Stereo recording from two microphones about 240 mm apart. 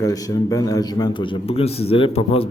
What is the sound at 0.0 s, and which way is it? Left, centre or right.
A man's voice, centre.